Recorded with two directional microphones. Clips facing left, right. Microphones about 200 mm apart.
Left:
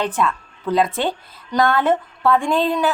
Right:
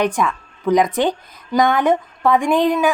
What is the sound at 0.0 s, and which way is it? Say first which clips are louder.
A woman's voice: right 2 dB; 15° right (ahead or behind).